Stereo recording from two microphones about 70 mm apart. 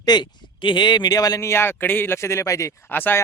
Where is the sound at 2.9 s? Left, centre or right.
Left.